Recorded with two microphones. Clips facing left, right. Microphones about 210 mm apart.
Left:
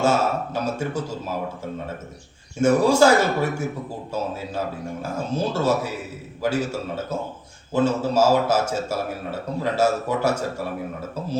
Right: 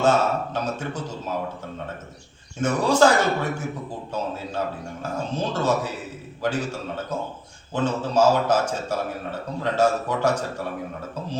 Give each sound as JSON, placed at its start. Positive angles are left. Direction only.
{"t": 0.0, "sound": "a man's voice", "side_deg": 10}
{"t": 2.6, "sound": "a man's voice", "side_deg": 10}
{"t": 5.0, "sound": "a man's voice", "side_deg": 10}